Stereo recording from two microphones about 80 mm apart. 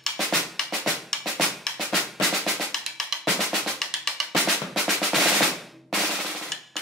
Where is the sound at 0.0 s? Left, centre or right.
Centre.